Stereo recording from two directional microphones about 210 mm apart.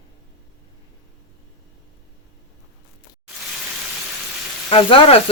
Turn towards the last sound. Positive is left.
turn(degrees=25)  # may be behind; listen again after turning